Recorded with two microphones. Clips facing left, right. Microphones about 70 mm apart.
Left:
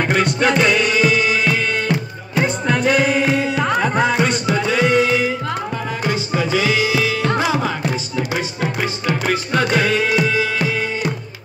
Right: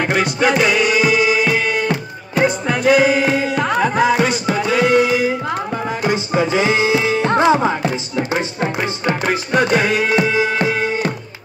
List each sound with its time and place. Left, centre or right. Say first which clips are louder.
0.0 s music: even; centre
6.0 s tabla: right 3 dB; right
9.2 s music: right 2 dB; centre